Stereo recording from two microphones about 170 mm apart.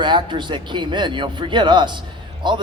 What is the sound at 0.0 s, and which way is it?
Speech, 25° right (ahead or behind).